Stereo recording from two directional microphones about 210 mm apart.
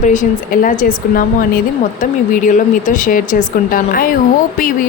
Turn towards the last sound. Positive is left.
turn(degrees=40)  # may be behind; listen again after turning